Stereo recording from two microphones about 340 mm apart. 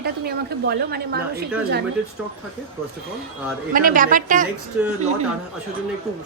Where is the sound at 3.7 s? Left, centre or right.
Right.